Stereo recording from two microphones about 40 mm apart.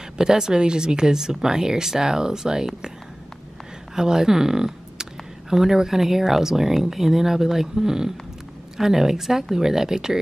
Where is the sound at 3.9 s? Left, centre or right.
Centre.